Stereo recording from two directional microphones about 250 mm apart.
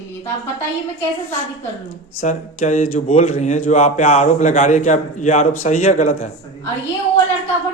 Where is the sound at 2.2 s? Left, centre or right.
Left.